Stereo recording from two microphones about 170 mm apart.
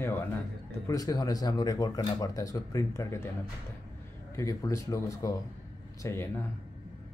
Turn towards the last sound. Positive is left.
turn(degrees=15)  # may be behind; listen again after turning